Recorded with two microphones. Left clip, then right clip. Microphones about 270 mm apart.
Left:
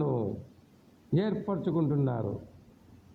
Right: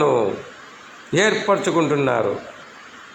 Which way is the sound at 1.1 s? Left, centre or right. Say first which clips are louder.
Right 15 dB; left.